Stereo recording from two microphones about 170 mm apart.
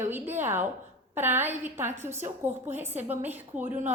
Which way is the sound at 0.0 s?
10° right (ahead or behind).